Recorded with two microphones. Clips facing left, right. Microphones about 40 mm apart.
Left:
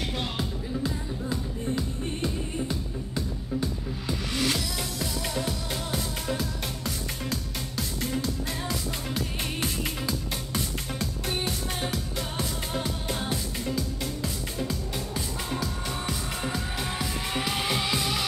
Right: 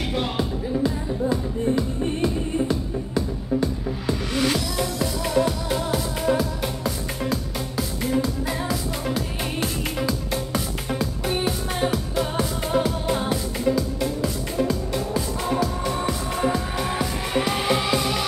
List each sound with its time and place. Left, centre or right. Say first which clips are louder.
0.1 s music: right 7 dB; centre
15.5 s music: right 9 dB; centre